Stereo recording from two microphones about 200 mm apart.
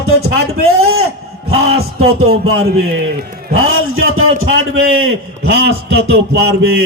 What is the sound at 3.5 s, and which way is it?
A man's voice, 90° right.